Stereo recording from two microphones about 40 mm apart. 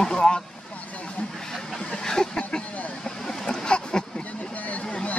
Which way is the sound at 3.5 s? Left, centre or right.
Left.